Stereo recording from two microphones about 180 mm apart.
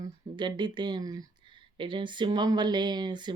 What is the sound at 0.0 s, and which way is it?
Speech, 25° right (ahead or behind).